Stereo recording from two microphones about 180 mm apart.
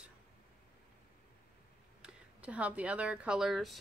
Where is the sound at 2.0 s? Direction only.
5° right (ahead or behind).